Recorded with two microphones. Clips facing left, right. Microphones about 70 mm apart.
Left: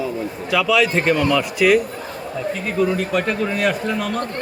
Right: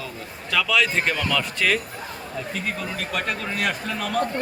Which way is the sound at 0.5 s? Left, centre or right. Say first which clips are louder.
Left 4 dB; centre.